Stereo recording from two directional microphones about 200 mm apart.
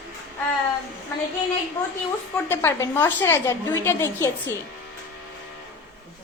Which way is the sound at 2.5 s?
10° left (ahead or behind).